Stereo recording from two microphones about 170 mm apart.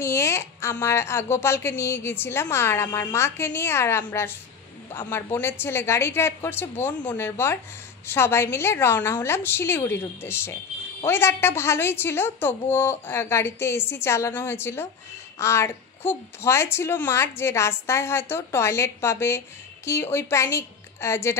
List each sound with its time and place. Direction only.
0.0 s speech: 15° left (ahead or behind)